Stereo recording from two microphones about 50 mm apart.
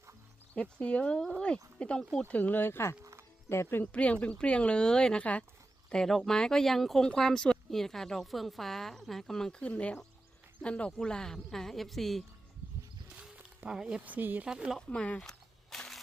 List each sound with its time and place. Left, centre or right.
0.5 s speech: left
2.2 s speech: left
3.0 s music: right
3.5 s speech: left
3.9 s speech: left
5.9 s a woman's voice: centre
9.6 s a woman's voice: left; by 12.2 s centre
13.7 s speech: centre
14.0 s speech: right
14.4 s speech: centre
14.8 s a woman's voice: centre
15.2 s a sound: centre